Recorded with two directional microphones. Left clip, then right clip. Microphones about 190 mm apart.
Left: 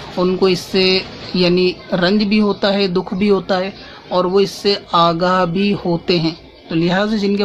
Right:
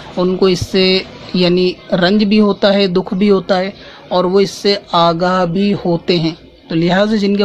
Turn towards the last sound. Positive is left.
turn(degrees=-25)  # may be behind; listen again after turning